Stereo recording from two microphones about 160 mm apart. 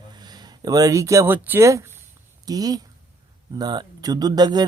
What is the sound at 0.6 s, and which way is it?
A man's voice, 25° right (ahead or behind).